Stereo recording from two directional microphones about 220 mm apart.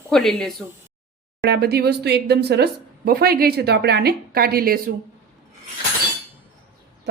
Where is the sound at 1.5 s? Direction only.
45° right (ahead or behind).